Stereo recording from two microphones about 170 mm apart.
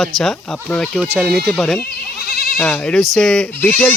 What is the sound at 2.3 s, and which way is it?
Goat, 65° left (ahead or behind).